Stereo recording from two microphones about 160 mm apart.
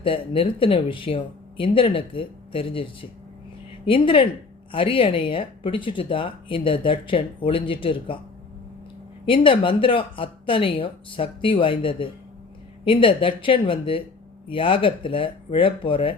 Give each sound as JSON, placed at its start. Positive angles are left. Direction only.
{"t": 0.0, "sound": "speech", "side_deg": 35}
{"t": 9.2, "sound": "speech", "side_deg": 35}